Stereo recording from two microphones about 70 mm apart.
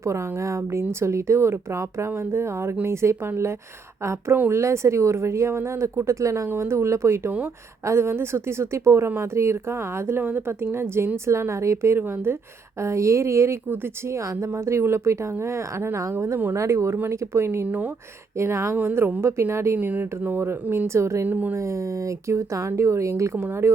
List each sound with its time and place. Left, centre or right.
0.0 s speech: right
18.8 s a woman's voice: right
19.2 s speech: right
19.8 s speech: right
21.2 s a woman's voice: right
21.5 s speech: right